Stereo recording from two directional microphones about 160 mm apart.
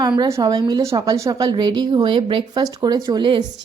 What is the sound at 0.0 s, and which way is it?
A woman's voice, 20° right (ahead or behind).